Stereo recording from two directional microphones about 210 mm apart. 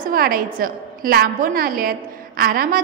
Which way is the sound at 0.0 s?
45° right (ahead or behind).